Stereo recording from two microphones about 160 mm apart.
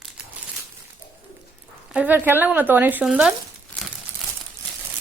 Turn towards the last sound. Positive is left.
turn(degrees=-5)  # may be behind; listen again after turning